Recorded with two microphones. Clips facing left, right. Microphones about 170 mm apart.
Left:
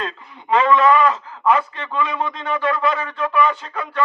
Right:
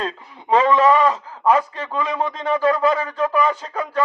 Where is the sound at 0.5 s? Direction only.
35° right (ahead or behind).